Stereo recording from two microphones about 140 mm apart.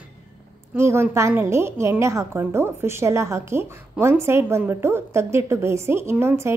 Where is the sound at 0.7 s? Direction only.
20° right (ahead or behind).